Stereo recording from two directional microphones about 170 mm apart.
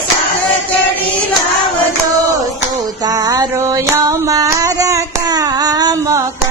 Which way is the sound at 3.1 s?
20° right (ahead or behind).